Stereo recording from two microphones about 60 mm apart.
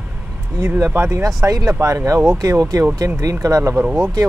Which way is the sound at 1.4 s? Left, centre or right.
Right.